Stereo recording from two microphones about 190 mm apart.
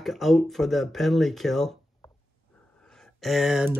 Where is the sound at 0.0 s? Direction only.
Centre (ahead or behind).